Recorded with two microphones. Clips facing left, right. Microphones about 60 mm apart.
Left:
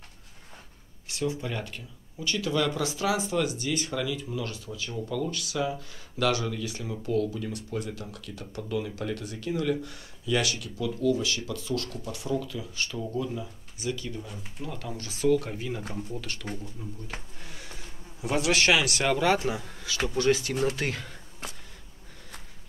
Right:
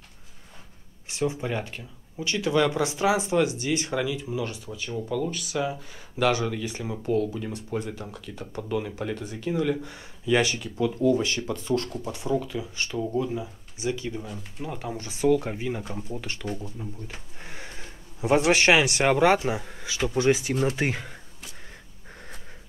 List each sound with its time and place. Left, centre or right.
1.0 s speech: right
7.3 s a man's voice: right